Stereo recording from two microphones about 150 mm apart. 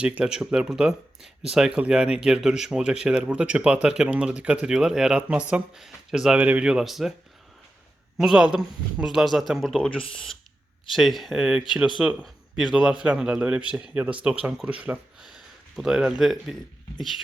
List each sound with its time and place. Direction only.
0.0 s speech: 10° right (ahead or behind)
8.2 s a man's voice: 5° right (ahead or behind)